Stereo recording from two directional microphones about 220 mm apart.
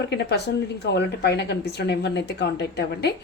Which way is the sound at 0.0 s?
50° left (ahead or behind).